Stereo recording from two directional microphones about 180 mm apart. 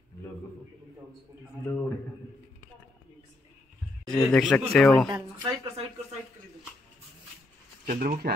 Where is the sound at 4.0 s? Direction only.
5° left (ahead or behind).